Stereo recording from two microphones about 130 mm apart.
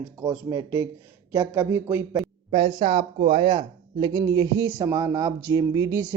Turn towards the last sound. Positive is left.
turn(degrees=-30)  # may be behind; listen again after turning